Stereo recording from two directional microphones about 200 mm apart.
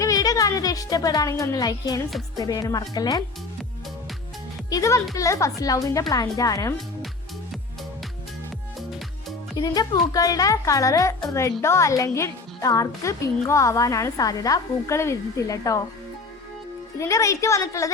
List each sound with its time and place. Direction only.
0.0 s a woman's voice: 15° left (ahead or behind)
4.7 s a woman's voice: 15° left (ahead or behind)
9.6 s a woman's voice: 20° left (ahead or behind)
17.0 s a woman's voice: 15° left (ahead or behind)